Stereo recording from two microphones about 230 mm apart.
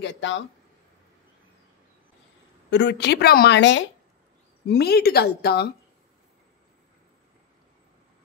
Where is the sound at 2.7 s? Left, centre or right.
Left.